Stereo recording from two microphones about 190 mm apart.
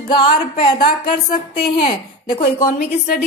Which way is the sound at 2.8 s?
45° left (ahead or behind).